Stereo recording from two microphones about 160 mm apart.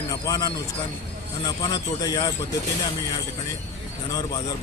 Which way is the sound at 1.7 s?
20° left (ahead or behind).